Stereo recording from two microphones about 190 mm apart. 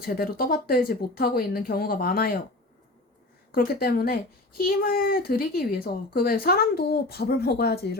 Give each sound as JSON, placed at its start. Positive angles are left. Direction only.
{"t": 0.0, "sound": "speech", "side_deg": 50}
{"t": 3.5, "sound": "speech", "side_deg": 50}